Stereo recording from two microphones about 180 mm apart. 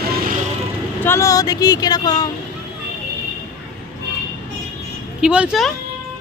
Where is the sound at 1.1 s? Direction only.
15° left (ahead or behind).